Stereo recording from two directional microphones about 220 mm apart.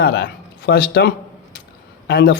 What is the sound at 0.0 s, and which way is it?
A man's voice, 45° left (ahead or behind).